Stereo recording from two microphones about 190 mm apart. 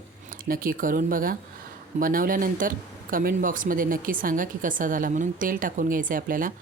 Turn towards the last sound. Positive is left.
turn(degrees=-45)  # may be behind; listen again after turning